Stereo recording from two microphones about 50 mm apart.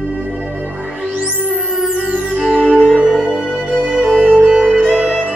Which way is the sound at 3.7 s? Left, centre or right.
Right.